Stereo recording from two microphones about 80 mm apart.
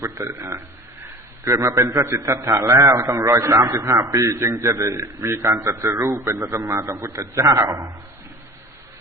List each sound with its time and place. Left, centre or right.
0.0 s a man's voice: right
1.5 s a man's voice: right
6.3 s a man's voice: right
6.7 s a man's voice: right